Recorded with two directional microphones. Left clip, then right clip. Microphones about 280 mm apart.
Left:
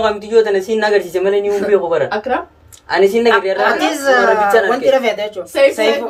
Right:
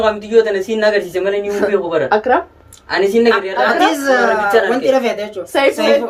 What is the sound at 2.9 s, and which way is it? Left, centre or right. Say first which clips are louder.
Speech: left 1 dB; centre.